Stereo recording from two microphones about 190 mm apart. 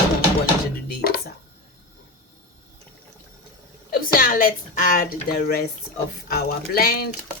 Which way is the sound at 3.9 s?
50° left (ahead or behind).